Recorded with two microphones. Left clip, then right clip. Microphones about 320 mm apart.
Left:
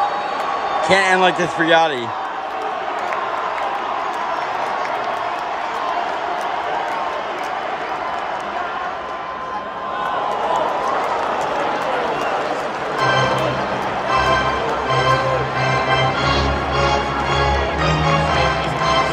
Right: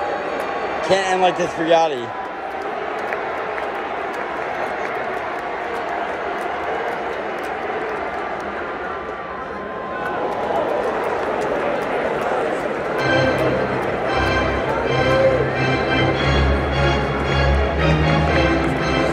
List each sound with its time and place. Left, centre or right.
0.8 s speech: left